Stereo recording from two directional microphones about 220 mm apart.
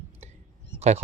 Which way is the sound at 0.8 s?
30° right (ahead or behind).